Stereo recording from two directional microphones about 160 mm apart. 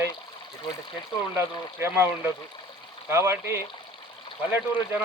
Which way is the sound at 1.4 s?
15° right (ahead or behind).